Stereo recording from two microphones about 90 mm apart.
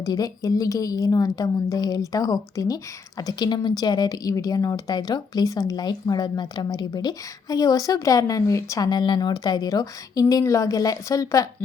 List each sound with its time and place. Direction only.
0.0 s a woman's voice: 45° left (ahead or behind)
8.9 s a woman's voice: 55° left (ahead or behind); by 11.4 s 40° left (ahead or behind)